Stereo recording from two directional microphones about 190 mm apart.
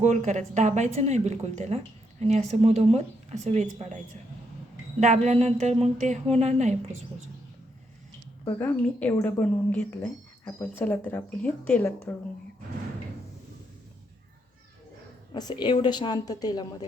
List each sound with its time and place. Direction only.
0.0 s a woman's voice: 40° right (ahead or behind)
8.4 s speech: 10° left (ahead or behind)
15.3 s a woman's voice: 20° left (ahead or behind)